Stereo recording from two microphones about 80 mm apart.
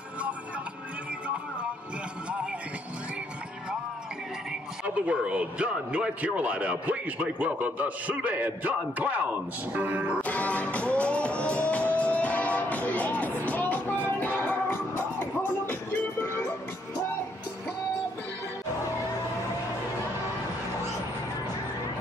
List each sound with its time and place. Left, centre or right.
4.8 s a man's voice: centre
10.2 s music: centre